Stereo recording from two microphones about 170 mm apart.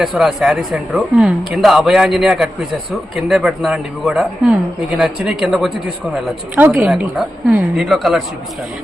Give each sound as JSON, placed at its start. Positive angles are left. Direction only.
{"t": 0.0, "sound": "speech", "side_deg": 0}